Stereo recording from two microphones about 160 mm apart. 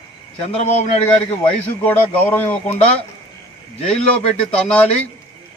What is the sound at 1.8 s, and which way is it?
Speech, 10° left (ahead or behind).